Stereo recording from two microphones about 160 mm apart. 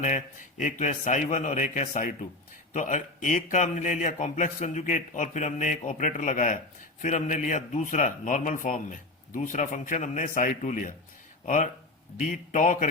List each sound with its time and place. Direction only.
0.0 s a man's voice: 50° left (ahead or behind)